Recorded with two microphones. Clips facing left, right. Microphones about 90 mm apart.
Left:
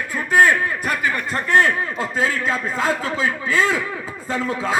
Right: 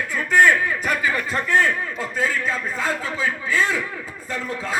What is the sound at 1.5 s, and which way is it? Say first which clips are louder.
A man's voice: left 3 dB; 75° left (ahead or behind).